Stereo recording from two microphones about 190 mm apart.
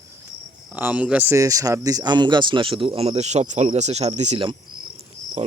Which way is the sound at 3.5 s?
35° right (ahead or behind).